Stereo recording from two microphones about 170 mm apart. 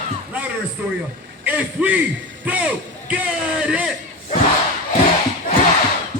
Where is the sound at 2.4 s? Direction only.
10° right (ahead or behind).